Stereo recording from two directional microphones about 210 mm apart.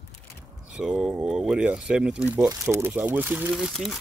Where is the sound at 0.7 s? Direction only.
5° right (ahead or behind).